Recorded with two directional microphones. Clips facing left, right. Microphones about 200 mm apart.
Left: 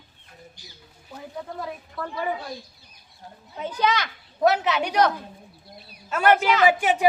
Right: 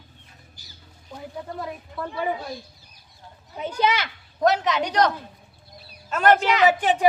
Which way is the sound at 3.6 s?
10° right (ahead or behind).